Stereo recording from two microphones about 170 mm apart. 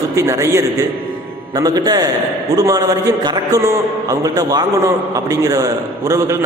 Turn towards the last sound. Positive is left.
turn(degrees=-20)  # may be behind; listen again after turning